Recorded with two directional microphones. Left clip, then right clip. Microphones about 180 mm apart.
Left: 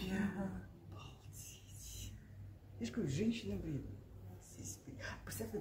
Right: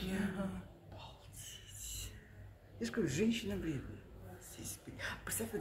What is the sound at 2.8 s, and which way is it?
Speech, 15° right (ahead or behind).